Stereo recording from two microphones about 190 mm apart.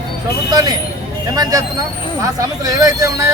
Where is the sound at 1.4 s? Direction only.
20° right (ahead or behind).